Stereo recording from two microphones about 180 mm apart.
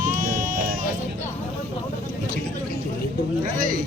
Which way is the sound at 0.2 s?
50° right (ahead or behind).